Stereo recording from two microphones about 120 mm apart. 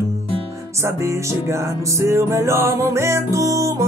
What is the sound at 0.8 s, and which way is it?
Music, 25° right (ahead or behind).